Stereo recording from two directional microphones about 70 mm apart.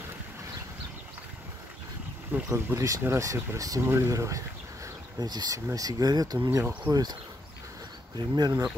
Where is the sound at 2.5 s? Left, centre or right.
Right.